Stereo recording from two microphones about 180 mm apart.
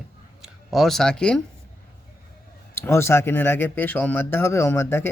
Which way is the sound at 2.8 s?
15° left (ahead or behind).